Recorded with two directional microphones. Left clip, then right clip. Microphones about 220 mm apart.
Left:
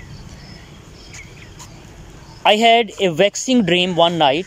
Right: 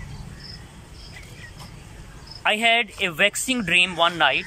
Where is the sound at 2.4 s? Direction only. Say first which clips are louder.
Left 7 dB; 30° left (ahead or behind).